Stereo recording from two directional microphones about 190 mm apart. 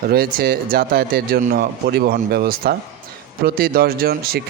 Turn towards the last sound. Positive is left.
turn(degrees=-55)  # may be behind; listen again after turning